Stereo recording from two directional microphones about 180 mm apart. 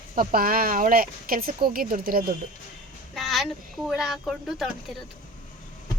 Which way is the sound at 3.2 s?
Centre (ahead or behind).